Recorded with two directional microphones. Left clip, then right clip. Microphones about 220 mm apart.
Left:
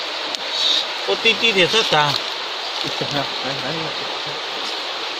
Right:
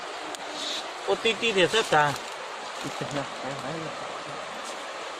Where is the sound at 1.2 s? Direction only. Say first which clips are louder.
Left 9 dB; 35° right (ahead or behind).